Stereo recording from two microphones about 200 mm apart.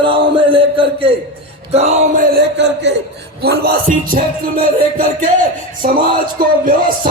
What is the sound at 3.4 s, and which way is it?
Music, 50° right (ahead or behind).